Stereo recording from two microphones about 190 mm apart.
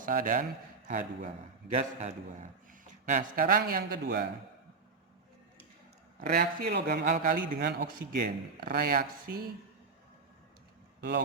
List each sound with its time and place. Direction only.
0.0 s a man's voice: 45° right (ahead or behind)
6.1 s a man's voice: 50° right (ahead or behind)
7.0 s a man's voice: 45° right (ahead or behind)